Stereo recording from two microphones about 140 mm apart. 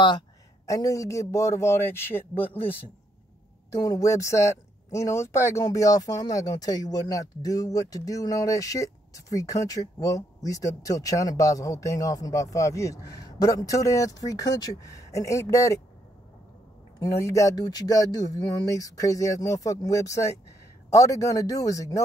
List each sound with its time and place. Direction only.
0.7 s speech: 25° left (ahead or behind)
17.0 s speech: 20° left (ahead or behind)